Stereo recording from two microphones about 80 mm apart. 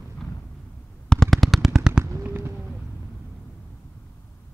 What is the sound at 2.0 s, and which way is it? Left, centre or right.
Fireworks, right.